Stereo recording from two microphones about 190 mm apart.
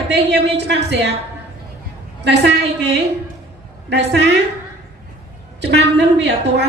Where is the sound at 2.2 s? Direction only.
65° right (ahead or behind).